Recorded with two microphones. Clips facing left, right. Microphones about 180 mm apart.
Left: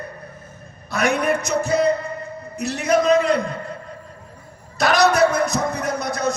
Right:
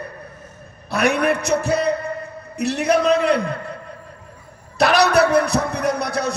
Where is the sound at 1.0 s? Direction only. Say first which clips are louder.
Right 1 dB; 65° right (ahead or behind).